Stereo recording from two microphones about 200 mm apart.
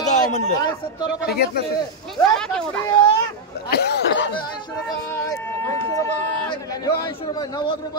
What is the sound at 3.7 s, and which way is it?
Snicker, 55° left (ahead or behind).